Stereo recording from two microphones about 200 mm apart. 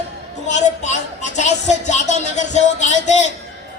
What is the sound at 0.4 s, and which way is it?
Speech, 35° left (ahead or behind).